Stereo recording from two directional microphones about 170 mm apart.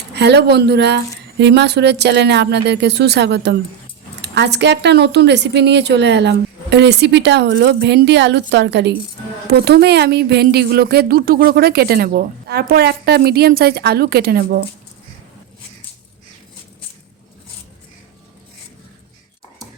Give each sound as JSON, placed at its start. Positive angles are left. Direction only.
{"t": 0.1, "sound": "a woman's voice", "side_deg": -90}
{"t": 9.5, "sound": "speech", "side_deg": -75}